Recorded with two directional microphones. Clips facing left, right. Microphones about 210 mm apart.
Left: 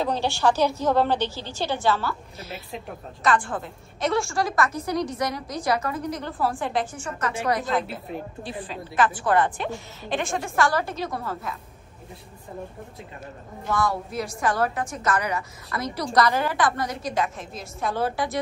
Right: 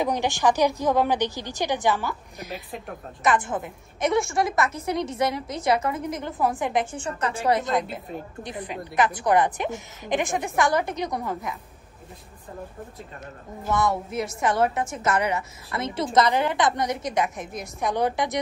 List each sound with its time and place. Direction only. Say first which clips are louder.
0.0 s a woman's voice: even; 15° right (ahead or behind)
13.7 s a woman's voice: right 1 dB; 20° right (ahead or behind)